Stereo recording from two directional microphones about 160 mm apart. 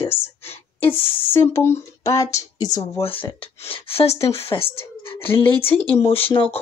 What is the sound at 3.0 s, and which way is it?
Speech, 35° left (ahead or behind).